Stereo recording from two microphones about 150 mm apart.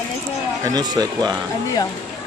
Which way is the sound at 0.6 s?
25° right (ahead or behind).